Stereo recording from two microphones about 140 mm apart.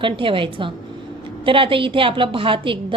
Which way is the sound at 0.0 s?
35° right (ahead or behind).